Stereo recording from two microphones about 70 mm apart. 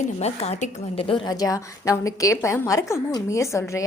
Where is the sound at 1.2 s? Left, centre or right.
Left.